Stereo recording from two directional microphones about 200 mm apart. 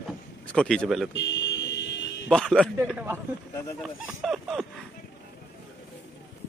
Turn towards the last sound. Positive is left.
turn(degrees=0)  # may be behind; listen again after turning